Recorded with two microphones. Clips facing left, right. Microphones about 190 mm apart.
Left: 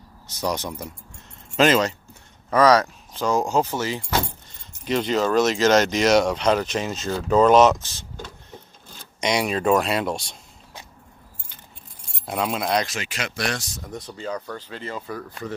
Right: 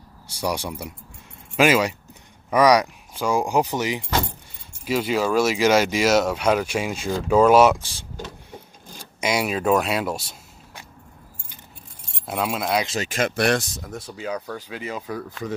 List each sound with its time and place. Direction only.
0.3 s speech: 10° right (ahead or behind)
8.5 s a sound: 10° right (ahead or behind)
12.1 s speech: centre (ahead or behind)
13.0 s speech: 50° right (ahead or behind)
13.8 s speech: 5° right (ahead or behind)